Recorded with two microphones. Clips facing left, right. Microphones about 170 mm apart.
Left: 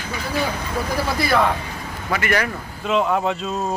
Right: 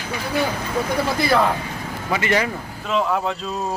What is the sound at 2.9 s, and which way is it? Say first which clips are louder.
Speech: left 2 dB; centre (ahead or behind).